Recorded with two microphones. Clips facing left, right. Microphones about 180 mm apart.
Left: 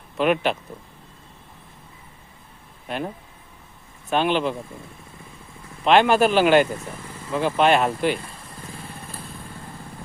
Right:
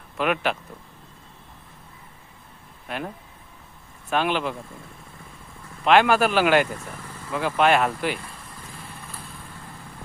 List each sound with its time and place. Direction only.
0.2 s speech: 25° left (ahead or behind)
4.1 s speech: 25° left (ahead or behind)
5.8 s speech: 25° left (ahead or behind)